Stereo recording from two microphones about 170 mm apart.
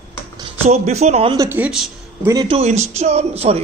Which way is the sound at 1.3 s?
20° right (ahead or behind).